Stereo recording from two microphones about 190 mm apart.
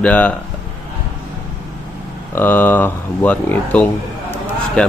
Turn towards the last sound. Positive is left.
turn(degrees=5)  # may be behind; listen again after turning